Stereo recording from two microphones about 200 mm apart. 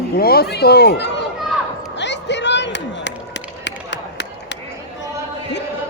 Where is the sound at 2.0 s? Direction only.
60° left (ahead or behind).